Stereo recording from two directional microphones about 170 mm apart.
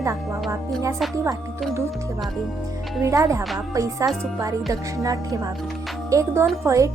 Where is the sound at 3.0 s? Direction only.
20° right (ahead or behind).